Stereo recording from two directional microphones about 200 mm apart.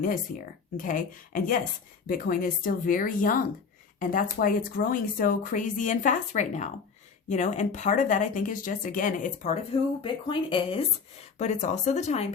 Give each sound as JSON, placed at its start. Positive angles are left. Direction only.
{"t": 0.3, "sound": "speech", "side_deg": 45}
{"t": 10.0, "sound": "speech", "side_deg": 25}